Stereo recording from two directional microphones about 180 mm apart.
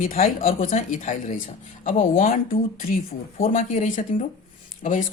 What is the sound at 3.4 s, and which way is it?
Speech, 40° left (ahead or behind).